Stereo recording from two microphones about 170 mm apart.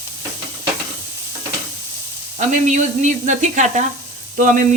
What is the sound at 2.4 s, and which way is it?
Speech, 45° right (ahead or behind).